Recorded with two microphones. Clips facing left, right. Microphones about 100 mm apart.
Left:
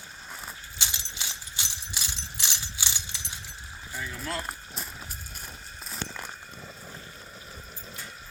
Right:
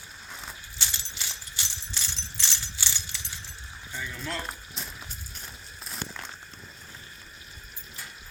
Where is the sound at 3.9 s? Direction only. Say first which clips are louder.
Left 1 dB; 5° left (ahead or behind).